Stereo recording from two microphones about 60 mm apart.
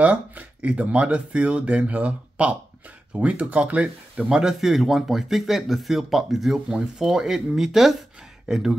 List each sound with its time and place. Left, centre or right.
0.0 s speech: right